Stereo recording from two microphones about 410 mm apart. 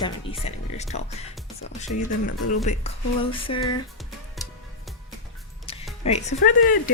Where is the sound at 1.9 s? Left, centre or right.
Left.